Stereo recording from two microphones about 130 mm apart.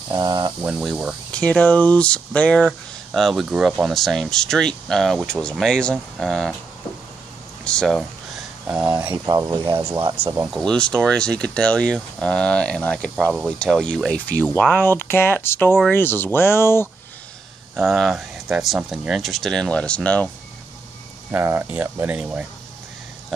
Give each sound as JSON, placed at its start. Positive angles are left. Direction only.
{"t": 0.1, "sound": "speech", "side_deg": -30}
{"t": 0.7, "sound": "speech", "side_deg": -5}
{"t": 1.3, "sound": "speech", "side_deg": 10}
{"t": 7.6, "sound": "speech", "side_deg": 5}
{"t": 9.1, "sound": "speech", "side_deg": -30}
{"t": 9.8, "sound": "speech", "side_deg": -20}
{"t": 10.5, "sound": "speech", "side_deg": 5}
{"t": 17.7, "sound": "speech", "side_deg": 0}
{"t": 21.3, "sound": "speech", "side_deg": -20}